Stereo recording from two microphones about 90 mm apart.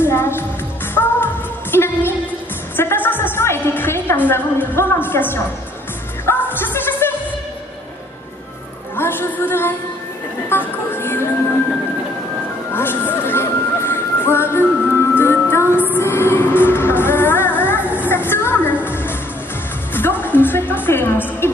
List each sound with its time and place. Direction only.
0.0 s music: 25° left (ahead or behind)
8.9 s music: 25° left (ahead or behind)
10.5 s speech: 25° left (ahead or behind)
12.7 s music: 25° left (ahead or behind)